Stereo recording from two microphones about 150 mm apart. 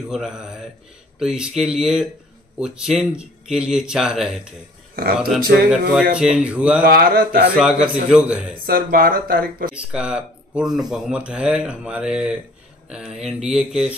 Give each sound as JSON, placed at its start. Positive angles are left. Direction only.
{"t": 0.1, "sound": "speech", "side_deg": -5}
{"t": 4.9, "sound": "speech", "side_deg": -75}
{"t": 6.1, "sound": "a man's voice", "side_deg": -5}
{"t": 6.8, "sound": "speech", "side_deg": -80}
{"t": 7.5, "sound": "a man's voice", "side_deg": -5}
{"t": 8.6, "sound": "speech", "side_deg": -80}
{"t": 9.7, "sound": "speech", "side_deg": -5}